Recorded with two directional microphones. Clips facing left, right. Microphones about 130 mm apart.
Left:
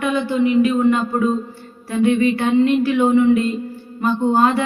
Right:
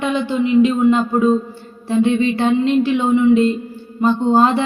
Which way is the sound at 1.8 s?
25° right (ahead or behind).